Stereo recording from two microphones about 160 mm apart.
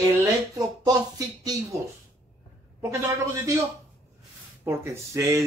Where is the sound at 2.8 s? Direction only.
15° right (ahead or behind).